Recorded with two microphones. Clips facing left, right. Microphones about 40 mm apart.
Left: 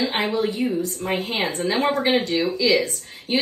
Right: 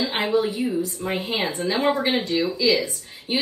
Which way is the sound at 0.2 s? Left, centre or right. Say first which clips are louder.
Even; left.